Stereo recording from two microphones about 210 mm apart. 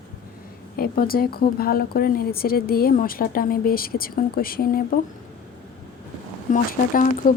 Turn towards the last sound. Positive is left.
turn(degrees=40)  # may be behind; listen again after turning